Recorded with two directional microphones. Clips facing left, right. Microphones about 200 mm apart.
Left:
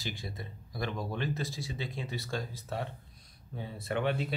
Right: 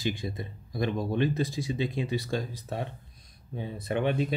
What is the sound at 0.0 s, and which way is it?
Speech, 20° right (ahead or behind).